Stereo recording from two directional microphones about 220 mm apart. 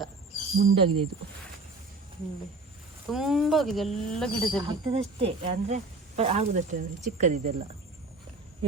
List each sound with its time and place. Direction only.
0.6 s speech: 25° right (ahead or behind)
3.1 s speech: centre (ahead or behind)
4.7 s speech: 25° right (ahead or behind)